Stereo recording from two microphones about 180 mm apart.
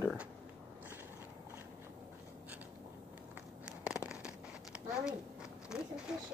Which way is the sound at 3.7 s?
5° right (ahead or behind).